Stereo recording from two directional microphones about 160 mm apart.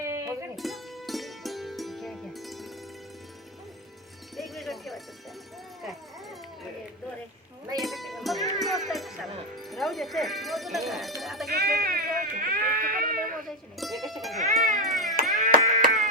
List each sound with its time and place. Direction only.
0.0 s music: 20° right (ahead or behind)
0.5 s music: centre (ahead or behind)
4.4 s music: centre (ahead or behind)
7.8 s music: centre (ahead or behind)
11.2 s sheep: centre (ahead or behind)
11.4 s sheep: 75° right (ahead or behind)
13.5 s music: centre (ahead or behind)
14.3 s cat: 55° right (ahead or behind)
14.8 s music: centre (ahead or behind)
15.4 s a sound: 50° right (ahead or behind)